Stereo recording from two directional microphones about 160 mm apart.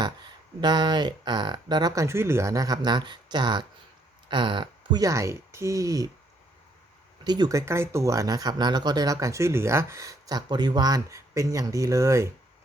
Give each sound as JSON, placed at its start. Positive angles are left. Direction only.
{"t": 0.6, "sound": "speech", "side_deg": -25}
{"t": 7.3, "sound": "speech", "side_deg": -25}